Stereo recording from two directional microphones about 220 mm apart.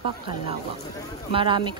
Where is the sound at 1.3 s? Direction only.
25° right (ahead or behind).